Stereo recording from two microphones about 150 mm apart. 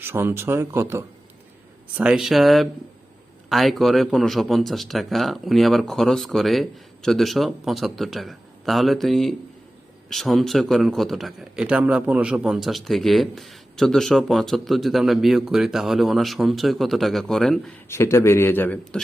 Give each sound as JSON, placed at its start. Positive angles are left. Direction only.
{"t": 0.0, "sound": "speech", "side_deg": -15}
{"t": 2.0, "sound": "a man's voice", "side_deg": -5}
{"t": 17.8, "sound": "speech", "side_deg": 15}